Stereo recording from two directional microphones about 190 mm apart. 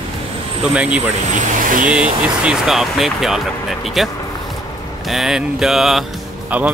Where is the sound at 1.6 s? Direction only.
45° right (ahead or behind).